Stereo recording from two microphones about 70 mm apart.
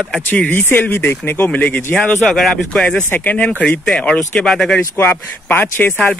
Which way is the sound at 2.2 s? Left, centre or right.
Centre.